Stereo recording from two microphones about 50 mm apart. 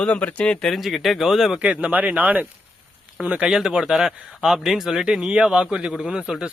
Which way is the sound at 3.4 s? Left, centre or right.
Centre.